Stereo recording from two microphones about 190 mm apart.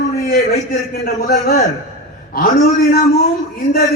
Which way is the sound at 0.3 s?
50° left (ahead or behind).